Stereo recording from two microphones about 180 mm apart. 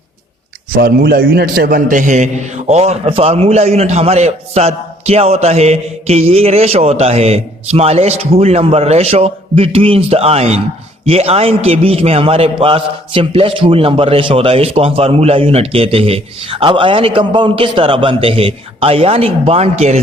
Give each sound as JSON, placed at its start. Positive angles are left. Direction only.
{"t": 0.8, "sound": "a man's voice", "side_deg": -55}